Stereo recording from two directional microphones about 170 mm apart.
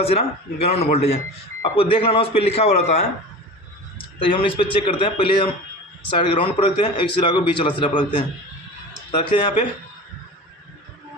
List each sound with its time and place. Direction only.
0.0 s a man's voice: 35° left (ahead or behind)